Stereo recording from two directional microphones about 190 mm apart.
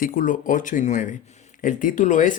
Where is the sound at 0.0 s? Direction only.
45° left (ahead or behind).